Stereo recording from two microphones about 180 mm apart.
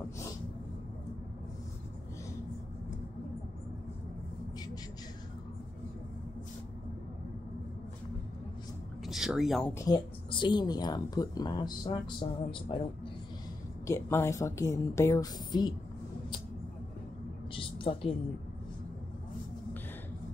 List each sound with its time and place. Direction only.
9.0 s speech: centre (ahead or behind)
9.8 s speech: 25° left (ahead or behind)
13.8 s a woman's voice: 15° left (ahead or behind)
17.6 s a sound: 30° left (ahead or behind)